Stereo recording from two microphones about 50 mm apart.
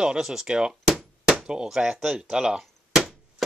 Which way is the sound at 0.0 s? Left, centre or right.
Centre.